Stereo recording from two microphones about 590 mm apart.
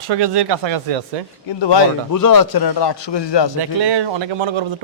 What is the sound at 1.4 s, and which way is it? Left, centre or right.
A man's voice, left.